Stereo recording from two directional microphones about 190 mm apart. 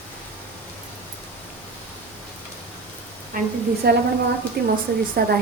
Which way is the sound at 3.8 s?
55° right (ahead or behind).